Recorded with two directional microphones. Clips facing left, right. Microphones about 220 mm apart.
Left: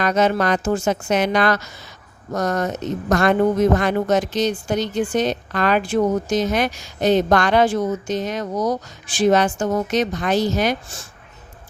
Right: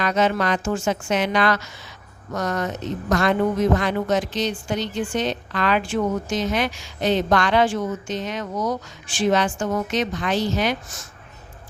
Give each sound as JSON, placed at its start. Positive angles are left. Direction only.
{"t": 0.0, "sound": "speech", "side_deg": 45}